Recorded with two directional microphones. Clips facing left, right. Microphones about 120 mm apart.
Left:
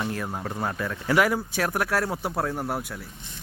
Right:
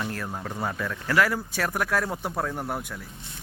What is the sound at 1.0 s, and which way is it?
Speech, 15° left (ahead or behind).